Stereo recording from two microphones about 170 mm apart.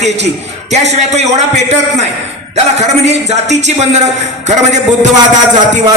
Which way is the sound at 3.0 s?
40° right (ahead or behind).